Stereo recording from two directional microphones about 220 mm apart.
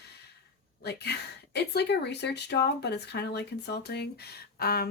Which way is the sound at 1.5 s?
50° left (ahead or behind).